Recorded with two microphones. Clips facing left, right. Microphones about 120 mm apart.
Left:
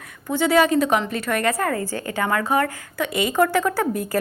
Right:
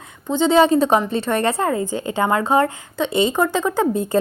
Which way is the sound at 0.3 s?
25° right (ahead or behind).